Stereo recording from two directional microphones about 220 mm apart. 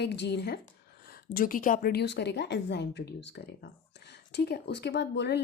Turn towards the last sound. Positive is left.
turn(degrees=50)  # may be behind; listen again after turning